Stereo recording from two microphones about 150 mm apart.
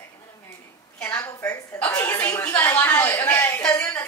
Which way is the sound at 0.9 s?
10° left (ahead or behind).